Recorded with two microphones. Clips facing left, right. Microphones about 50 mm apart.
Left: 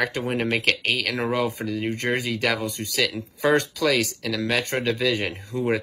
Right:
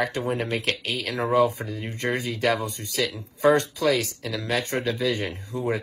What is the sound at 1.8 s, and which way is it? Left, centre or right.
Speech, left.